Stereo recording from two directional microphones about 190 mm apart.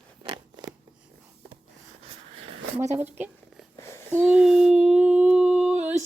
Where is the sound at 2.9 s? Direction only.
10° right (ahead or behind).